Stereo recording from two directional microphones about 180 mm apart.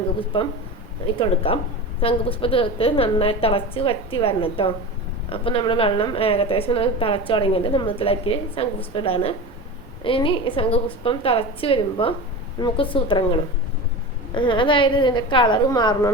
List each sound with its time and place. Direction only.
0.3 s a woman's voice: 30° left (ahead or behind)
14.3 s a woman's voice: 25° left (ahead or behind)